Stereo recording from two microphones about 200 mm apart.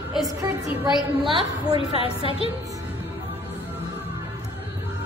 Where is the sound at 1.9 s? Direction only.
30° left (ahead or behind).